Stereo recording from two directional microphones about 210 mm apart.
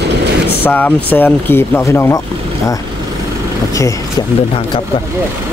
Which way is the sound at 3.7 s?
15° left (ahead or behind).